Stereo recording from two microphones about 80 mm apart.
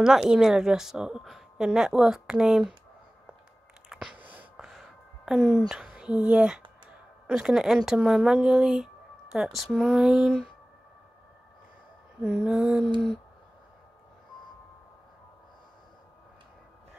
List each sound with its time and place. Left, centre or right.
0.0 s speech: centre
3.9 s a sound: centre
4.2 s a sound: centre
4.6 s music: centre
5.7 s speech: centre
12.2 s speech: centre